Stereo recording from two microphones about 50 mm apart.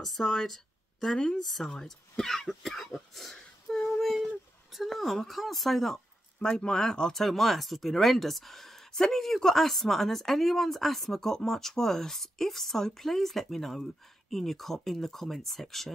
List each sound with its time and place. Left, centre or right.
0.0 s speech: centre
1.4 s speech: centre
4.0 s a sound: centre
4.7 s speech: centre
6.4 s speech: centre